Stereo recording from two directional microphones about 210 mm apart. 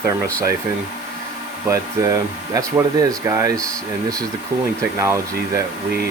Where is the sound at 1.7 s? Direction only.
15° right (ahead or behind).